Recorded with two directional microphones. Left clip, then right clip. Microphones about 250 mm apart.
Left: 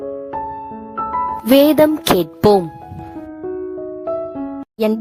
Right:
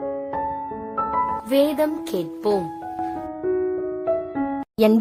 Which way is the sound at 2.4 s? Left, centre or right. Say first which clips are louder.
Left 9 dB; left.